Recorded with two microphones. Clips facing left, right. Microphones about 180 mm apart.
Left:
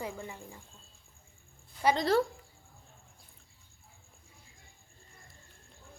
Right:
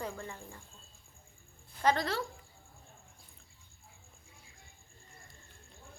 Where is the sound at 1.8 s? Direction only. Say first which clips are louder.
Left 1 dB; 20° left (ahead or behind).